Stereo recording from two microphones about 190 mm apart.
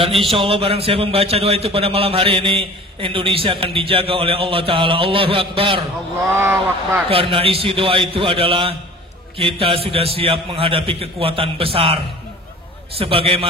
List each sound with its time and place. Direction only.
0.2 s a man's voice: 30° right (ahead or behind)
6.3 s speech: 15° right (ahead or behind)
7.1 s a man's voice: 30° right (ahead or behind)